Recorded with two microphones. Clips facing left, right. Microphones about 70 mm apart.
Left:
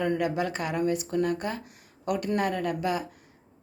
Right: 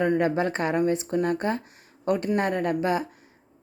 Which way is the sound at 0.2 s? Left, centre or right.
Right.